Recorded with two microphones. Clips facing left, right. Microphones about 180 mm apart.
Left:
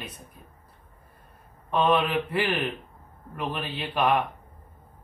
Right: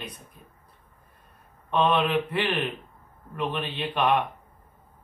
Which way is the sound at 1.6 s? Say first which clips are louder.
Even; 5° left (ahead or behind).